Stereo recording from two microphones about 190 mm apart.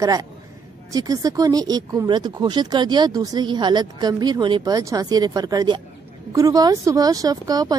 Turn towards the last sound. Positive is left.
turn(degrees=-20)  # may be behind; listen again after turning